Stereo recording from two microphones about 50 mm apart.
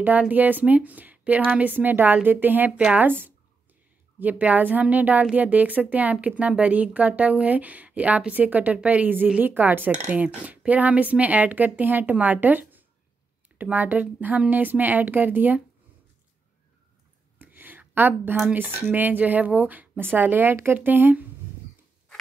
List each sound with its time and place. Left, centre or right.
0.3 s speech: right
4.2 s a woman's voice: right
17.4 s a sound: right
18.5 s speech: right